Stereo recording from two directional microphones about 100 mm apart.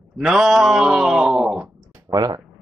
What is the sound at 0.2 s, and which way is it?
Speech, 5° right (ahead or behind).